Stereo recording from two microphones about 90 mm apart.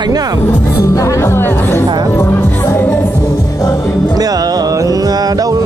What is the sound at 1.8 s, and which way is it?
Music, 50° right (ahead or behind).